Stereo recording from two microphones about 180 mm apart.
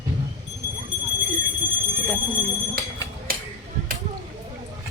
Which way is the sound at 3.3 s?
55° right (ahead or behind).